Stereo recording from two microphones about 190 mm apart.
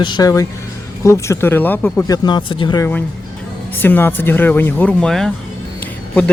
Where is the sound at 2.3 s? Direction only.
25° left (ahead or behind).